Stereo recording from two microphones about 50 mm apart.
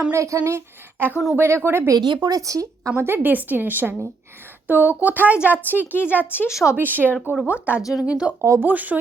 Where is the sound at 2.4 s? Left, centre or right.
Right.